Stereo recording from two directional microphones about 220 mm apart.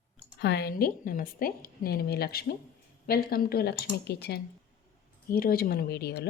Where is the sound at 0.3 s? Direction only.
50° left (ahead or behind).